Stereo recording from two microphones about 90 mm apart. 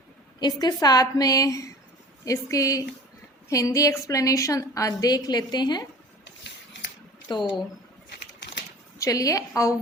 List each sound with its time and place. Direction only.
0.3 s a woman's voice: 50° left (ahead or behind)
7.3 s speech: 55° left (ahead or behind)
9.0 s a woman's voice: 35° left (ahead or behind)